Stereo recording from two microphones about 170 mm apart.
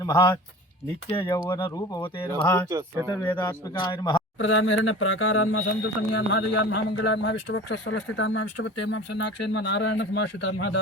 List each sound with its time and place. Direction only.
0.0 s speech: 15° left (ahead or behind)
2.6 s speech: 15° right (ahead or behind)
3.3 s speech: 25° left (ahead or behind)
4.4 s speech: 90° left